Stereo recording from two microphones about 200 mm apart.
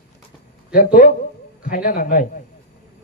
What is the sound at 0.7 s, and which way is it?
A man's voice, 45° left (ahead or behind).